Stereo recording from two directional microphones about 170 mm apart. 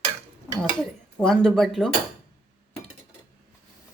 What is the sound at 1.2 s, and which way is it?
Speech, 5° left (ahead or behind).